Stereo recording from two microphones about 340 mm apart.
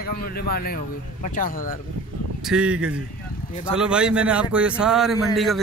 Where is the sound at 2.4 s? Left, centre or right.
Centre.